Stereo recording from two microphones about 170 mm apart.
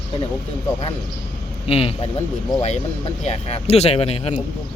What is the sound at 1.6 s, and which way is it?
Speech, 35° left (ahead or behind).